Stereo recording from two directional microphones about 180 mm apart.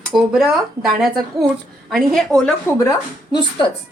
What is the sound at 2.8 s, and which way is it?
Speech, 15° left (ahead or behind).